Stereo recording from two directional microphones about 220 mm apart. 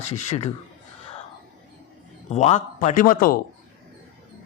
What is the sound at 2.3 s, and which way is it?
A man's voice, 30° left (ahead or behind).